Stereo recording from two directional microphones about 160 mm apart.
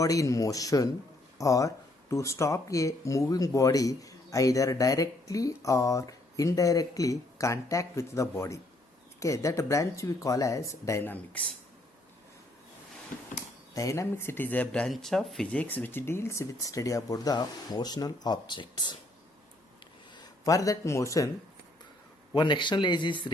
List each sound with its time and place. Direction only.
0.0 s speech: 20° left (ahead or behind)
13.7 s speech: 20° left (ahead or behind)
20.1 s speech: 20° left (ahead or behind)
22.4 s speech: 30° left (ahead or behind)